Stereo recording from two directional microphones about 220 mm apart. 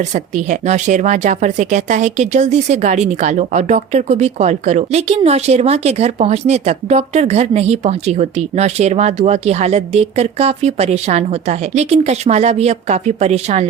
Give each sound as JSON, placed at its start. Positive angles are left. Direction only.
{"t": 0.1, "sound": "speech", "side_deg": -35}